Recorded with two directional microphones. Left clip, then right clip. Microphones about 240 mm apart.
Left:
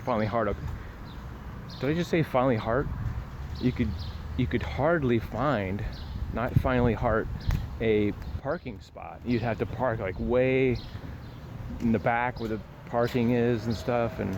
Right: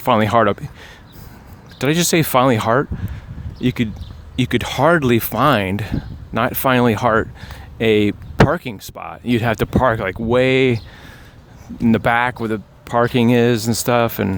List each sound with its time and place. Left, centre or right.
0.0 s speech: right
1.8 s speech: right
11.9 s speech: right